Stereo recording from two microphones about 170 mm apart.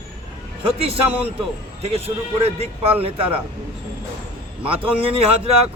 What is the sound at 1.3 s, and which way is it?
A man's voice, 35° right (ahead or behind).